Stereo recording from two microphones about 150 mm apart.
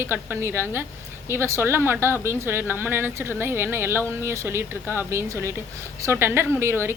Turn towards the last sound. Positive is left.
turn(degrees=-15)  # may be behind; listen again after turning